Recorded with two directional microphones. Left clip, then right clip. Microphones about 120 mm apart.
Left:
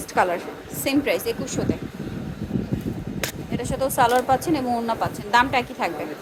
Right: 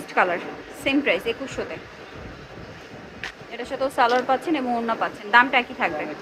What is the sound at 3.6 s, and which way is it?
A woman's voice, 60° left (ahead or behind).